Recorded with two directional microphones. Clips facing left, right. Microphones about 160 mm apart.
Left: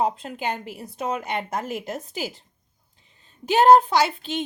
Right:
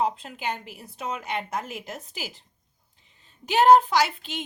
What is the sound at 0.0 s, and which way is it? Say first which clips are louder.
Speech: left 2 dB; 35° left (ahead or behind).